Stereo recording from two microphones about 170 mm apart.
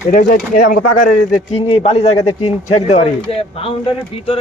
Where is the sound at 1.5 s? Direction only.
35° left (ahead or behind).